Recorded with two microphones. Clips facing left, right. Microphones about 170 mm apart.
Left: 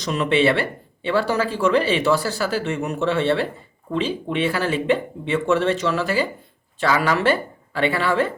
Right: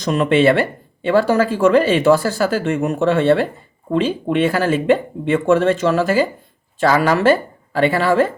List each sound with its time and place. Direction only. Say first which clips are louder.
0.0 s speech: right 5 dB; 50° right (ahead or behind)